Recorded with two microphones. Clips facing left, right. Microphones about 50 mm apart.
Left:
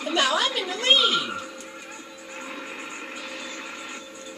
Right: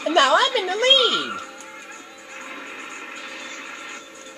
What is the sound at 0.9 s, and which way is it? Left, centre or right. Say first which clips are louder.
Speech: right 1 dB; right.